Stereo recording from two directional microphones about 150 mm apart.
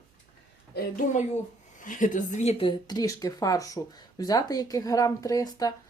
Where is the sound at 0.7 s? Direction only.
90° left.